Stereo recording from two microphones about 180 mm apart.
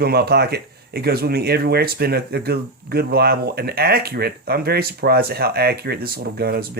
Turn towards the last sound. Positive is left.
turn(degrees=-60)  # may be behind; listen again after turning